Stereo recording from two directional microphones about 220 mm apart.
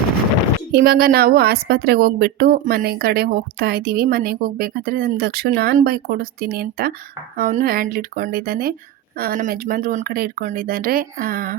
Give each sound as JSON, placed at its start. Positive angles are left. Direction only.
{"t": 0.7, "sound": "a woman's voice", "side_deg": -45}